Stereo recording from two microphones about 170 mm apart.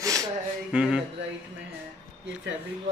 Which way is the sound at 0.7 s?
5° right (ahead or behind).